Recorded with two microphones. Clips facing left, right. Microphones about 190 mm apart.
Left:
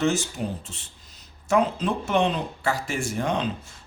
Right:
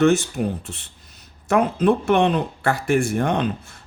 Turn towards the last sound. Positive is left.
turn(degrees=-60)  # may be behind; listen again after turning